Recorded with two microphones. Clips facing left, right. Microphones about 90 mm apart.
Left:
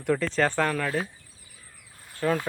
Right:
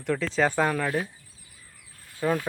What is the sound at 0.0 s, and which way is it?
Speech, centre (ahead or behind).